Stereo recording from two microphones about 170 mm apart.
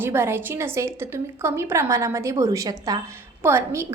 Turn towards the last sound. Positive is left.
turn(degrees=-15)  # may be behind; listen again after turning